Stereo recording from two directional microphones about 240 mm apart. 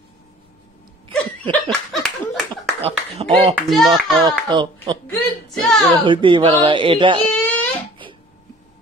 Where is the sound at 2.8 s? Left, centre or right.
Right.